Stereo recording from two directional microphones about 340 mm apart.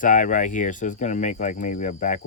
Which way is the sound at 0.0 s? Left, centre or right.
Left.